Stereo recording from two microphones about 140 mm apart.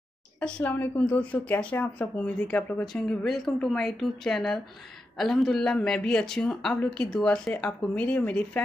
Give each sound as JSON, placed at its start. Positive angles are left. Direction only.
{"t": 0.4, "sound": "speech", "side_deg": 10}